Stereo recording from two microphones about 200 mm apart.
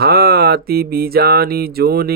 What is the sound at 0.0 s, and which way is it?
Mantra, 50° right (ahead or behind).